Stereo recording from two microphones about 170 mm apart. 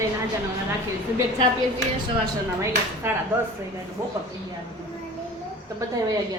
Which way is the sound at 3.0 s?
15° right (ahead or behind).